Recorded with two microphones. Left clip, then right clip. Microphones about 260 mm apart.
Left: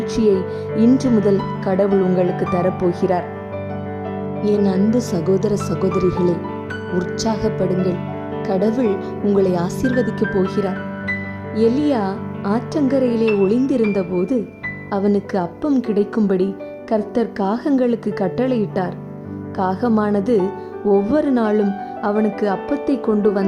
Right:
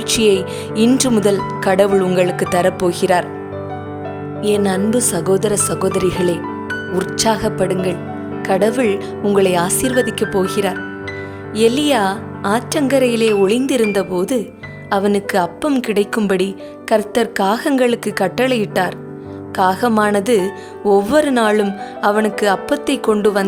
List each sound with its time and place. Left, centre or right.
0.1 s speech: right
4.5 s a woman's voice: right
6.9 s a woman's voice: right
9.8 s speech: right
10.2 s a woman's voice: right